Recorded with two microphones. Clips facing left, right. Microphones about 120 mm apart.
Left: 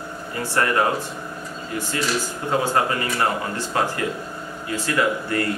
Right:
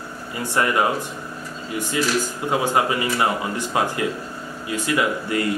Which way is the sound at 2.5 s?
15° right (ahead or behind).